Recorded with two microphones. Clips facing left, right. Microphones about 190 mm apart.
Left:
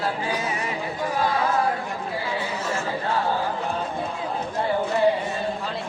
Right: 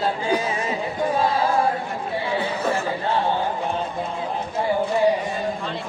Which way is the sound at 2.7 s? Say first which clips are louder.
Right 2 dB; 25° right (ahead or behind).